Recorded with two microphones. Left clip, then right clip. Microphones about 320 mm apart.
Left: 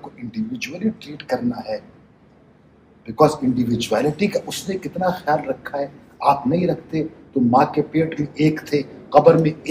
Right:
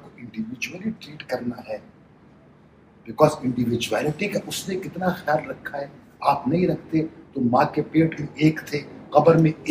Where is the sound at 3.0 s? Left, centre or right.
Left.